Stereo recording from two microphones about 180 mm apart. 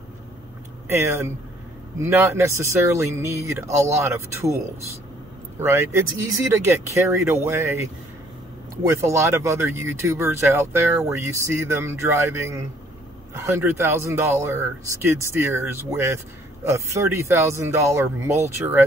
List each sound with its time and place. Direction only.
0.8 s speech: 15° right (ahead or behind)
8.9 s speech: 15° right (ahead or behind)